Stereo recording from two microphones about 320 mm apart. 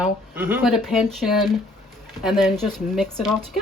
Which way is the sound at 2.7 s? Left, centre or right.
Centre.